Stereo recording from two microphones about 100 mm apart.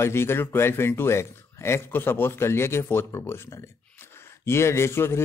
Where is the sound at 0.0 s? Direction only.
25° left (ahead or behind).